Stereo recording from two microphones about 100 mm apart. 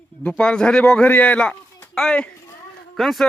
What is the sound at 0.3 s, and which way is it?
Speech, 10° left (ahead or behind).